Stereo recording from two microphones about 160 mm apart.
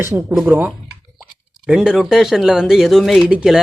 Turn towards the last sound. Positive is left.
turn(degrees=-5)  # may be behind; listen again after turning